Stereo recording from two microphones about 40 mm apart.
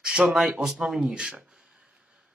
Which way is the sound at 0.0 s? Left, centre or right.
Right.